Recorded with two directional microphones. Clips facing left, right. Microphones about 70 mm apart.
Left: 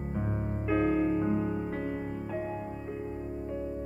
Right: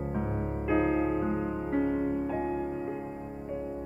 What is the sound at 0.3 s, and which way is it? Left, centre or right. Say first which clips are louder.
Music: right 1 dB; centre.